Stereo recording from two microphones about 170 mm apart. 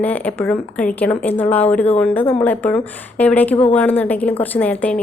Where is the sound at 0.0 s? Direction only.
10° left (ahead or behind).